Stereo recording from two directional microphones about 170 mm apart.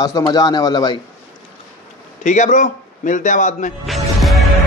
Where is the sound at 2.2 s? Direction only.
45° left (ahead or behind).